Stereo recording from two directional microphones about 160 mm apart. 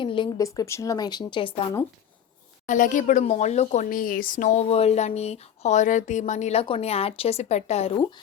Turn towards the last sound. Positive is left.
turn(degrees=40)  # may be behind; listen again after turning